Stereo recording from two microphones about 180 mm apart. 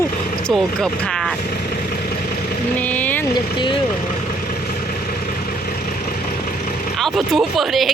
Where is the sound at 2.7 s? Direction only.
10° left (ahead or behind).